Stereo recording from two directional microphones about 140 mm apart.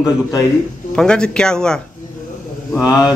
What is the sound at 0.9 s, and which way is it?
Speech, 5° left (ahead or behind).